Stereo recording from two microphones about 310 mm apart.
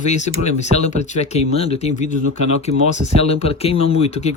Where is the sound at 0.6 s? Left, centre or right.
Left.